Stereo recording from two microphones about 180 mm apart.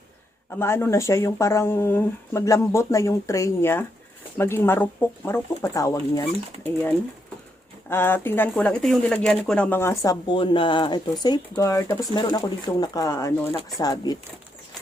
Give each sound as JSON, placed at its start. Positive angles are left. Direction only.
{"t": 0.5, "sound": "speech", "side_deg": 15}
{"t": 7.9, "sound": "speech", "side_deg": 10}